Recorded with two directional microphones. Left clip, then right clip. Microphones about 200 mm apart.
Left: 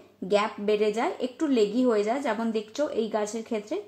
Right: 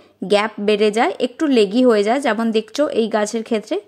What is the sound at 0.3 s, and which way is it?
Speech, 40° right (ahead or behind).